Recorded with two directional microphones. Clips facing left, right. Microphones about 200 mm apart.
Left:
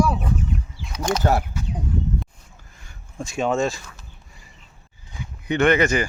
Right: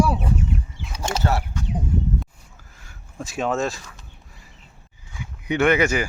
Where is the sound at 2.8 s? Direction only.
5° right (ahead or behind).